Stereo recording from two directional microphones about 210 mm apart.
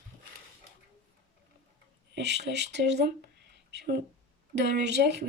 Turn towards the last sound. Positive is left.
turn(degrees=-55)  # may be behind; listen again after turning